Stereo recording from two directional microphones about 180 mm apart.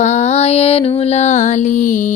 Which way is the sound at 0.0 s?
40° left (ahead or behind).